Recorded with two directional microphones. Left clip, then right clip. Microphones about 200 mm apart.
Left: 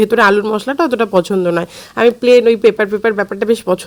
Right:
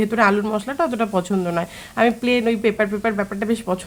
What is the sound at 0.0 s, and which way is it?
Speech, 35° left (ahead or behind).